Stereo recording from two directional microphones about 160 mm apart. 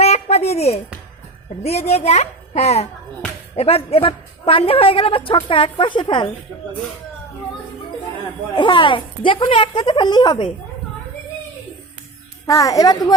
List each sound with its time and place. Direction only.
0.0 s a sound: 40° left (ahead or behind)
1.6 s a woman's voice: 40° left (ahead or behind)
8.5 s a woman's voice: 30° left (ahead or behind)
12.5 s a child's voice: 20° left (ahead or behind)